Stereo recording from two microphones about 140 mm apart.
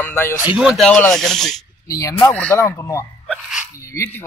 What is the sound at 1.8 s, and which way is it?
Speech, 25° left (ahead or behind).